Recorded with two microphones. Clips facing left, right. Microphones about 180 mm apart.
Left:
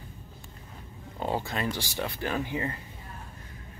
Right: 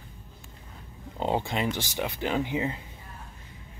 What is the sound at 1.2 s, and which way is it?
Speech, 20° right (ahead or behind).